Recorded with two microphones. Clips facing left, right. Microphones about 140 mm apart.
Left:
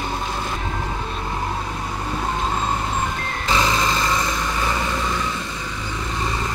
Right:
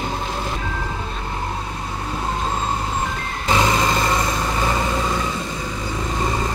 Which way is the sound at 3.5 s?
15° right (ahead or behind).